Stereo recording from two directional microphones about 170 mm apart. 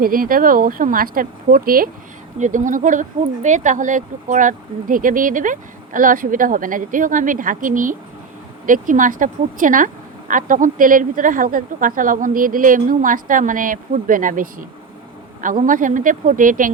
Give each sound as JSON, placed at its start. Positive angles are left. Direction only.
{"t": 0.0, "sound": "speech", "side_deg": -55}